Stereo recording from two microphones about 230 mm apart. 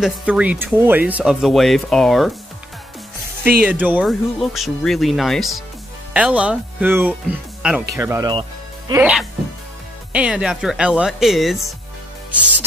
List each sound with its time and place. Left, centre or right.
0.0 s speech: centre
3.6 s speech: centre
10.1 s speech: centre